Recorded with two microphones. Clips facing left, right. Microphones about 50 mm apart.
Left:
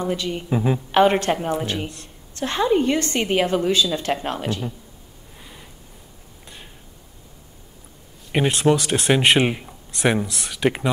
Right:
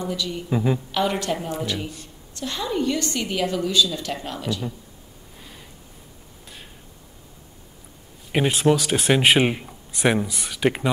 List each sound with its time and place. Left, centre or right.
0.0 s a woman's voice: left
0.5 s a woman's voice: centre
0.9 s a woman's voice: left
8.3 s speech: centre